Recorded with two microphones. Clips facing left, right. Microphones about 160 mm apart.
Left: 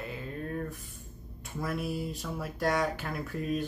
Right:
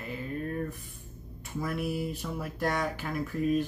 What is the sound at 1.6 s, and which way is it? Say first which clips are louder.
Music: right 1 dB; centre (ahead or behind).